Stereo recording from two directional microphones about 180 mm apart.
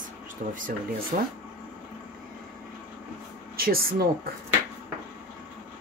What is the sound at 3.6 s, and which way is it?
Speech, 55° right (ahead or behind).